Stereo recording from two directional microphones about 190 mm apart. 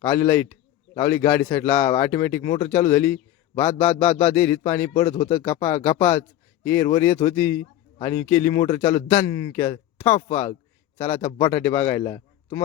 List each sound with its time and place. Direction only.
0.1 s a man's voice: 10° left (ahead or behind)
11.3 s speech: 30° left (ahead or behind)
11.5 s speech: 10° left (ahead or behind)